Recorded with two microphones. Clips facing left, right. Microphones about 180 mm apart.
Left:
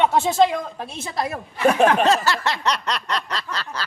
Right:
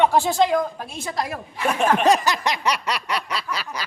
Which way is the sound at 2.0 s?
15° right (ahead or behind).